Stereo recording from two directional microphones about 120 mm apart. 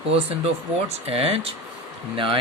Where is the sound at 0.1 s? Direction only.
55° right (ahead or behind).